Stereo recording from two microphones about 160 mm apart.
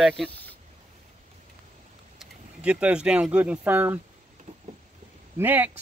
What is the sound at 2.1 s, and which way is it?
Speech, 5° right (ahead or behind).